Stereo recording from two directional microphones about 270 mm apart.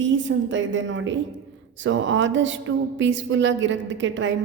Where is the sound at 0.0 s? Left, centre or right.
Right.